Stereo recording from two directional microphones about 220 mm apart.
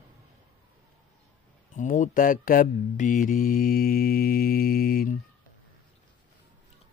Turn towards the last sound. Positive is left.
turn(degrees=40)  # may be behind; listen again after turning